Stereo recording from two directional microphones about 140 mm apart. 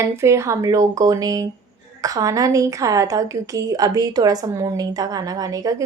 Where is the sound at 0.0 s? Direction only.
20° right (ahead or behind).